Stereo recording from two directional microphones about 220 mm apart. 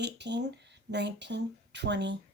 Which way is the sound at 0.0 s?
50° right (ahead or behind).